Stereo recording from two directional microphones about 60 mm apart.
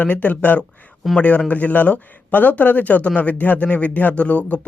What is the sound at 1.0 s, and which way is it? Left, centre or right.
Speech, centre.